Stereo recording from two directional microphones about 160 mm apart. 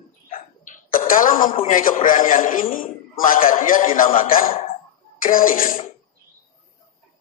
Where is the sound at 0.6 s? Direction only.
55° left (ahead or behind).